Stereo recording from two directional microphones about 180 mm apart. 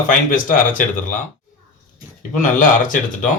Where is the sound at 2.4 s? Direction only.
45° left (ahead or behind).